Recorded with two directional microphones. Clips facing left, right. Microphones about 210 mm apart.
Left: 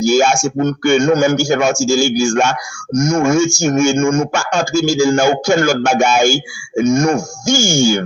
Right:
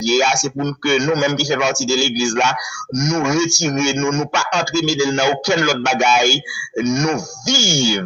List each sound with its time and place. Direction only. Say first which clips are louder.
0.0 s speech: left 4 dB; 50° left (ahead or behind)